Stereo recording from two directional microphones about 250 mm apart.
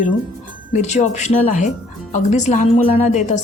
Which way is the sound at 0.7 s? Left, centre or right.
Left.